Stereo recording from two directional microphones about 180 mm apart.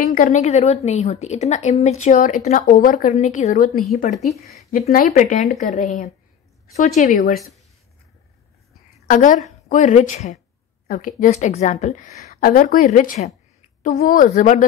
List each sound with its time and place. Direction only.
0.1 s a woman's voice: 45° left (ahead or behind)
4.1 s speech: centre (ahead or behind)
4.6 s a woman's voice: 50° left (ahead or behind)
9.0 s a woman's voice: 45° left (ahead or behind)